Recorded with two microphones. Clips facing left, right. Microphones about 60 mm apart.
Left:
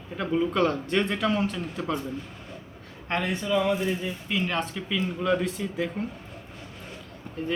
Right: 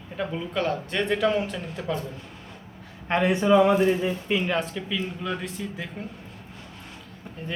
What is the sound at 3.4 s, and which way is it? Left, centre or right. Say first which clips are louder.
Speech: right 8 dB; right.